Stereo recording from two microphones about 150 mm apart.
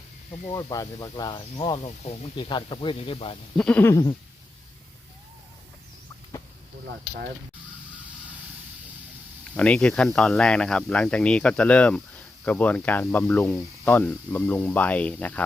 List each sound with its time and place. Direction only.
0.4 s speech: 25° left (ahead or behind)
3.6 s speech: 10° left (ahead or behind)
9.6 s speech: 5° left (ahead or behind)